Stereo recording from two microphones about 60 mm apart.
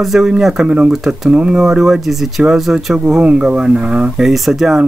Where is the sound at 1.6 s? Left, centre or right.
Centre.